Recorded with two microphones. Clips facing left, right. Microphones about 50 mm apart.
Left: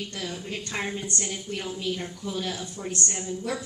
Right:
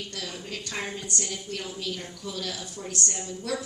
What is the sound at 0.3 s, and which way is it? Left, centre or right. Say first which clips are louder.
A woman's voice: left 2 dB; centre.